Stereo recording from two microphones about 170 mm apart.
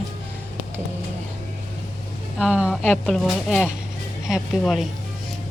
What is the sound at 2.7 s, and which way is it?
Speech, 5° left (ahead or behind).